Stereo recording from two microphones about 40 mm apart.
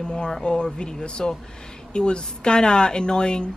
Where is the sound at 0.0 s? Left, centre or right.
Left.